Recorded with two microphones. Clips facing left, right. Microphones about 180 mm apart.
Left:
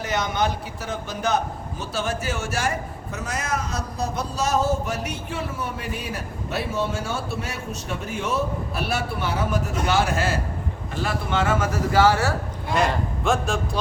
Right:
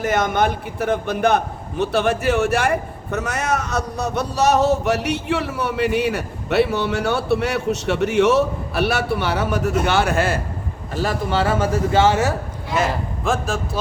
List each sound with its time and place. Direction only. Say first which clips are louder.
0.0 s a man's voice: right 6 dB; 50° right (ahead or behind)
10.9 s speech: right 4 dB; 35° right (ahead or behind); by 12.3 s 20° right (ahead or behind)
12.7 s a man's voice: right 1 dB; 5° right (ahead or behind)